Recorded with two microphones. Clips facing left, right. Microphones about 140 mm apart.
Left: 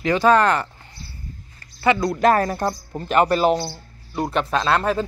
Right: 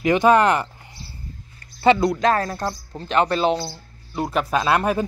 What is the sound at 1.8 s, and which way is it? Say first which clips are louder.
Speech: right 3 dB; 25° right (ahead or behind).